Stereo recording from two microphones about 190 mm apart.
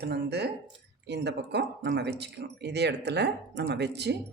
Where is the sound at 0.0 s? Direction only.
60° right (ahead or behind).